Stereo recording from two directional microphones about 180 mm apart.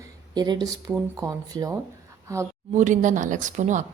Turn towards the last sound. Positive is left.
turn(degrees=-40)  # may be behind; listen again after turning